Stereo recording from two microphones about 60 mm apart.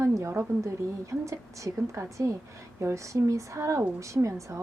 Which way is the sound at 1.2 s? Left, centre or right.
Right.